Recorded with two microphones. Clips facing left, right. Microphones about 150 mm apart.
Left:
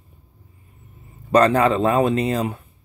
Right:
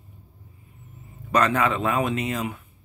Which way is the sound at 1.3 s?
35° left (ahead or behind).